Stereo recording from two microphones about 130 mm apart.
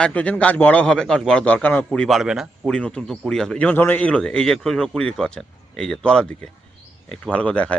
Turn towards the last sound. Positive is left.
turn(degrees=10)  # may be behind; listen again after turning